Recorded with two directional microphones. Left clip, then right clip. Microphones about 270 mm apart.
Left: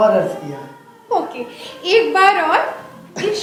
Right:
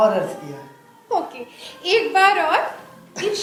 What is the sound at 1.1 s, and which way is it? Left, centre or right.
A child's voice, right.